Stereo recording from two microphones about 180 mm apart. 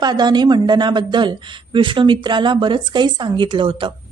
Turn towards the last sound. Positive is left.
turn(degrees=-30)  # may be behind; listen again after turning